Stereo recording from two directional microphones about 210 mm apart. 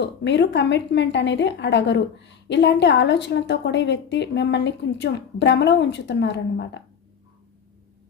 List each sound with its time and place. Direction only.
0.0 s a woman's voice: 55° left (ahead or behind)